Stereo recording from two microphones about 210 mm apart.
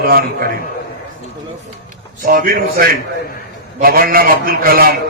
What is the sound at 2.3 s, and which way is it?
A man's voice, 45° right (ahead or behind).